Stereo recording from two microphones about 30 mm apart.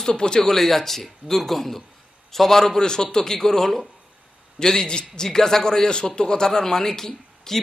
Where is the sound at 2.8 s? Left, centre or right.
Left.